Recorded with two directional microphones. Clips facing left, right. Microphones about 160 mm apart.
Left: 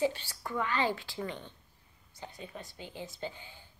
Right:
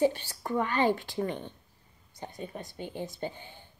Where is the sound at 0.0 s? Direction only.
50° right (ahead or behind).